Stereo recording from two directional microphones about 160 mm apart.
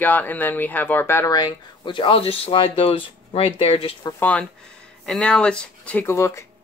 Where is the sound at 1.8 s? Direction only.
30° left (ahead or behind).